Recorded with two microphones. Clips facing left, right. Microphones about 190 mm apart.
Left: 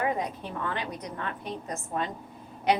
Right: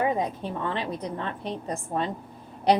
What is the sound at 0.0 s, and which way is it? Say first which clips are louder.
A woman's voice: right 4 dB; 25° right (ahead or behind).